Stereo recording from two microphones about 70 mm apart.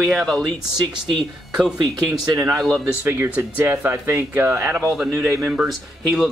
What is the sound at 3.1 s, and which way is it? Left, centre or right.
Speech, right.